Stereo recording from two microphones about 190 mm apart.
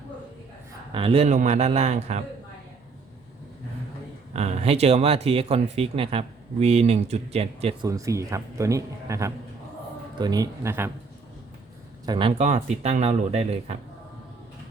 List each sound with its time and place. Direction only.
0.9 s speech: 30° right (ahead or behind)
4.4 s speech: 35° right (ahead or behind)
7.9 s speech: 15° right (ahead or behind)
12.0 s speech: 25° right (ahead or behind)